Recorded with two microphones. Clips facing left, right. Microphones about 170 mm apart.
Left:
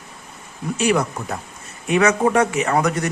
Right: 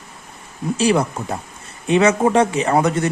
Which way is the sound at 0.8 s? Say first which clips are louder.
Right 2 dB; 30° right (ahead or behind).